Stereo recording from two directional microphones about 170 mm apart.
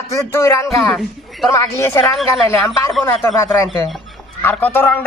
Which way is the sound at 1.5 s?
15° left (ahead or behind).